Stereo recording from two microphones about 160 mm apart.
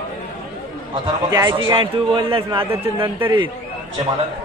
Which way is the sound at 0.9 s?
25° right (ahead or behind).